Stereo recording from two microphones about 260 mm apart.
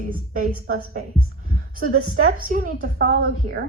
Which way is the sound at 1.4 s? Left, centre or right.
Right.